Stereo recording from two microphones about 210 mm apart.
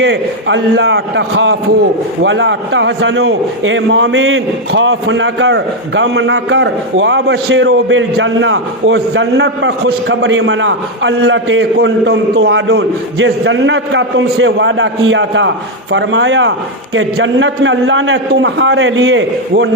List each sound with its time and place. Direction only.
0.0 s a man's voice: 60° right (ahead or behind)